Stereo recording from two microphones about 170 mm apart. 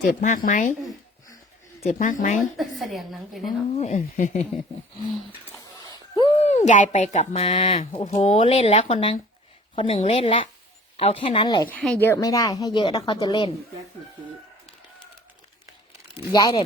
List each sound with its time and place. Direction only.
0.2 s speech: 50° left (ahead or behind)
1.9 s speech: 50° left (ahead or behind)
2.8 s a woman's voice: centre (ahead or behind)
3.7 s speech: 40° left (ahead or behind)
5.0 s a woman's voice: centre (ahead or behind)
5.5 s speech: 25° left (ahead or behind)
11.7 s a woman's voice: 10° left (ahead or behind); by 13.5 s 25° left (ahead or behind)
16.3 s a woman's voice: 25° left (ahead or behind)